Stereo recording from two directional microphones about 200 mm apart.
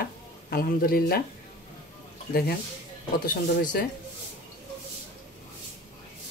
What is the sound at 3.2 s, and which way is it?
Speech, 45° left (ahead or behind).